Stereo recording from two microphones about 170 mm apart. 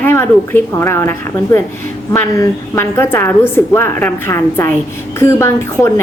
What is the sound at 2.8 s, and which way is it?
A woman's voice, 15° left (ahead or behind).